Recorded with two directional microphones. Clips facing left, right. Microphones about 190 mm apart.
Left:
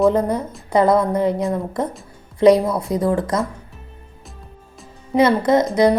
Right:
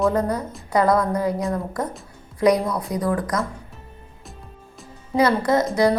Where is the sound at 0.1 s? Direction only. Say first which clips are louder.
Left 3 dB; 20° left (ahead or behind).